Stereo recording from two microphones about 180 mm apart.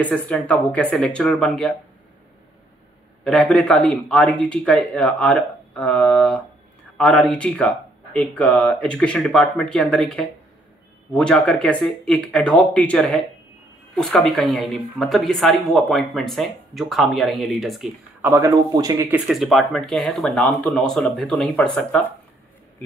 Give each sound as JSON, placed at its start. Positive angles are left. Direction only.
{"t": 0.0, "sound": "speech", "side_deg": 10}
{"t": 3.3, "sound": "speech", "side_deg": 5}
{"t": 18.2, "sound": "speech", "side_deg": -15}
{"t": 19.1, "sound": "speech", "side_deg": 0}